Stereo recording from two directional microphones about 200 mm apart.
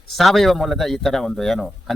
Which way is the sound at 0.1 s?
Centre (ahead or behind).